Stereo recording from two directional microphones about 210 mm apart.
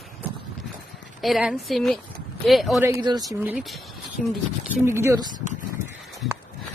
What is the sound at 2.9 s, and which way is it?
Speech, 20° right (ahead or behind).